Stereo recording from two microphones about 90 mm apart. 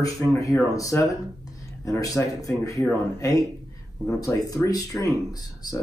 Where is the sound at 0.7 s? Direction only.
40° left (ahead or behind).